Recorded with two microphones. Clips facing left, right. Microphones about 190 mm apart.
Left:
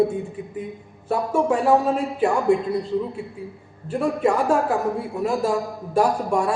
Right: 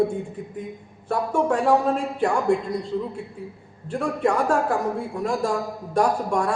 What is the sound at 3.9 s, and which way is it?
A man's voice, 5° left (ahead or behind).